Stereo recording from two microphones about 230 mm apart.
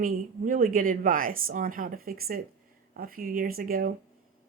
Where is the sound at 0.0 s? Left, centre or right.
Right.